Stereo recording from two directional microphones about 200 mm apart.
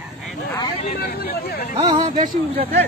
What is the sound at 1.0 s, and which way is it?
Speech, 50° left (ahead or behind).